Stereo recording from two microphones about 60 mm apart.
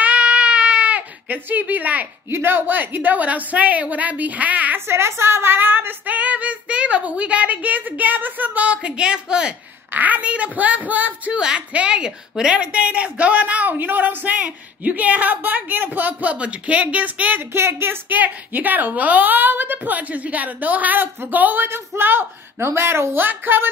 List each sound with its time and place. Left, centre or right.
0.0 s baby cry: centre
2.3 s a woman's voice: right
4.7 s a woman's voice: right
6.1 s a woman's voice: right
9.9 s a woman's voice: right
11.3 s a woman's voice: centre
17.5 s speech: right
18.2 s a woman's voice: right
23.2 s a woman's voice: right